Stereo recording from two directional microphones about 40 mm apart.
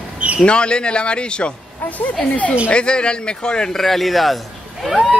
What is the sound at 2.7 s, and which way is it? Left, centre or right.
A man's voice, left.